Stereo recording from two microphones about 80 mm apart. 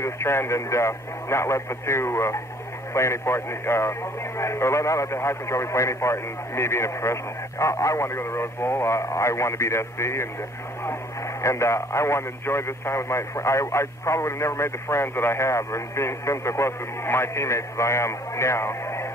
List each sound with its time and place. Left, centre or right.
0.0 s a man's voice: left
11.4 s a man's voice: left